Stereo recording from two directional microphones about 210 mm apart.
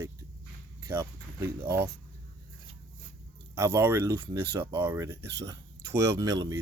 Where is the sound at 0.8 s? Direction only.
15° right (ahead or behind).